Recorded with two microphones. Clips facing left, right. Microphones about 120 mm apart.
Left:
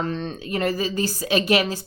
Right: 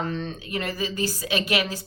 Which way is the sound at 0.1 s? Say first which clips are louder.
Left 3 dB; 35° left (ahead or behind).